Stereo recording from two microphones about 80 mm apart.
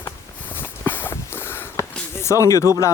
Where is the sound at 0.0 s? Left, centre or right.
Left.